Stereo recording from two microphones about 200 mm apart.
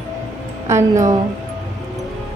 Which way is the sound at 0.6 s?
15° right (ahead or behind).